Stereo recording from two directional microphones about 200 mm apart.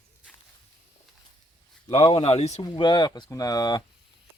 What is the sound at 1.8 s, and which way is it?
Speech, 25° left (ahead or behind).